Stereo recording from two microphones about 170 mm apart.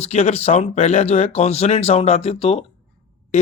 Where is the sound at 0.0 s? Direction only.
40° left (ahead or behind).